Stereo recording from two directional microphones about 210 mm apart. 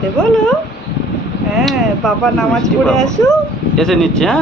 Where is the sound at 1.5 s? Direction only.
Centre (ahead or behind).